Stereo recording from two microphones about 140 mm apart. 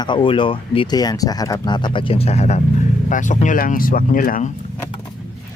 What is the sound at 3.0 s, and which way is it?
Speech, 65° left (ahead or behind).